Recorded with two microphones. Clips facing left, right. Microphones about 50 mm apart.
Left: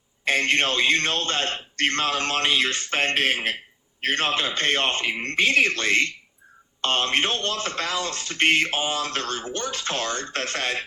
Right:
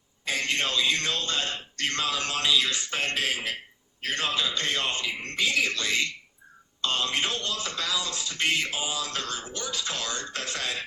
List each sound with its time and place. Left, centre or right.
0.3 s speech: left